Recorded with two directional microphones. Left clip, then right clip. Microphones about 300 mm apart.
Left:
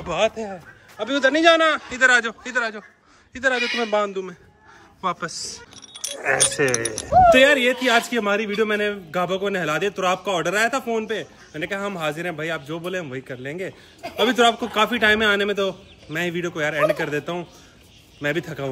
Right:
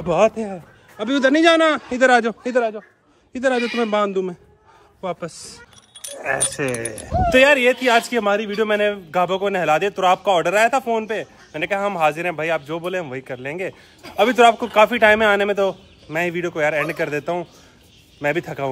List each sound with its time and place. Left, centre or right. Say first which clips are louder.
0.9 s a man's voice: right 2 dB; right
3.5 s speech: right 1 dB; right
4.0 s a man's voice: right 4 dB; centre